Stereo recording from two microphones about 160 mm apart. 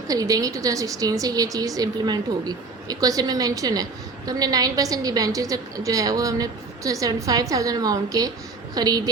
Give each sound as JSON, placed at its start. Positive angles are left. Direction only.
{"t": 0.1, "sound": "a woman's voice", "side_deg": -20}